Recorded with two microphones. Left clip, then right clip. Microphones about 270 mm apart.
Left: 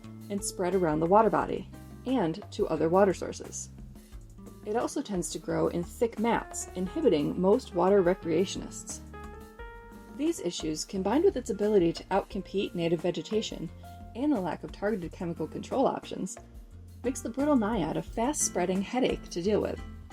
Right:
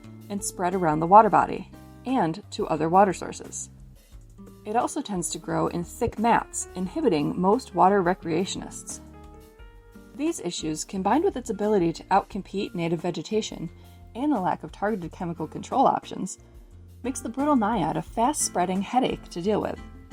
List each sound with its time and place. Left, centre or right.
0.4 s speech: right
4.6 s speech: right
10.2 s speech: right